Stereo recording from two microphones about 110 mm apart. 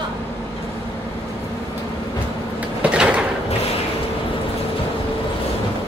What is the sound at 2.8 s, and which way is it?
Sliding door, 10° right (ahead or behind).